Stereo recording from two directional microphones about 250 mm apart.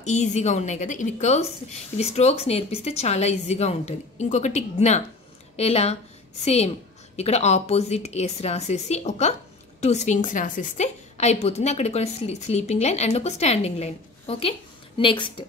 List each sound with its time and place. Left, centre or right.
0.0 s a woman's voice: left